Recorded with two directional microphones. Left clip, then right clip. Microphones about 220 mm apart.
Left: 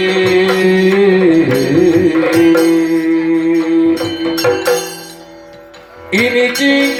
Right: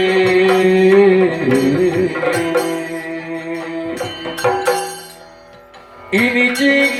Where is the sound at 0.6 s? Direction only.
50° left (ahead or behind).